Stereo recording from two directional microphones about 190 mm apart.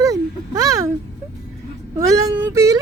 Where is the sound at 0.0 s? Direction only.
15° right (ahead or behind).